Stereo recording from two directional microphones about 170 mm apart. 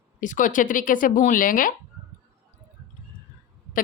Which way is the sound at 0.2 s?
50° left (ahead or behind).